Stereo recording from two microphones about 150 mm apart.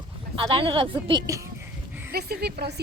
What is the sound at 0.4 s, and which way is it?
Speech, 35° right (ahead or behind).